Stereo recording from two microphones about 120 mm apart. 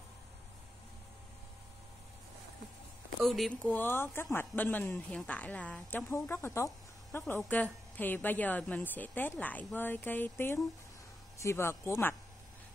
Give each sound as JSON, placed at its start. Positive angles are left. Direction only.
{"t": 3.3, "sound": "speech", "side_deg": 0}
{"t": 3.7, "sound": "a woman's voice", "side_deg": 20}